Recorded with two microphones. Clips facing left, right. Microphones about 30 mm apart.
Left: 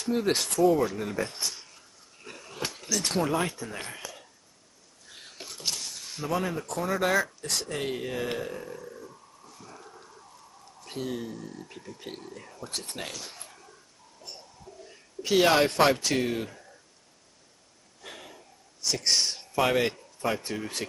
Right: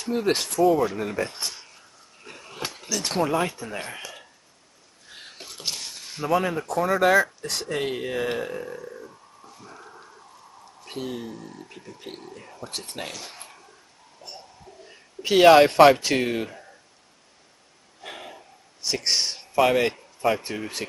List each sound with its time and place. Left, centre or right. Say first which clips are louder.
0.0 s speech: right 2 dB; centre
2.2 s a sound: right 1 dB; centre
3.3 s speech: right 4 dB; centre
4.0 s a sound: right 3 dB; right
6.8 s speech: right 7 dB; centre
7.4 s speech: right 4 dB; centre
9.6 s a sound: right 2 dB; right
10.8 s speech: right 1 dB; centre
14.2 s a sound: right 3 dB; right
15.8 s speech: right 8 dB; centre
18.0 s gasp: right 6 dB; right
19.5 s speech: right 5 dB; centre
20.3 s speech: right 2 dB; centre